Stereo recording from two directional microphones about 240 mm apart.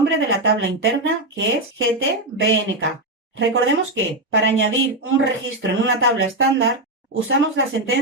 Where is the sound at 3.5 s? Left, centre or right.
Right.